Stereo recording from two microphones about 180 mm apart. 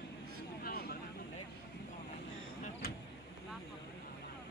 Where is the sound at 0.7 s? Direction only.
50° left (ahead or behind).